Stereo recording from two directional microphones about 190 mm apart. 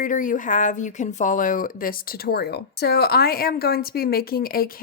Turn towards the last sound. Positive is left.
turn(degrees=50)  # may be behind; listen again after turning